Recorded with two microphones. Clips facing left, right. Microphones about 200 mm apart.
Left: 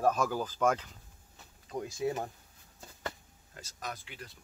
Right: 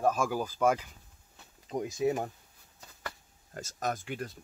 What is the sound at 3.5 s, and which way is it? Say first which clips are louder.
Speech: right 8 dB; 45° right (ahead or behind).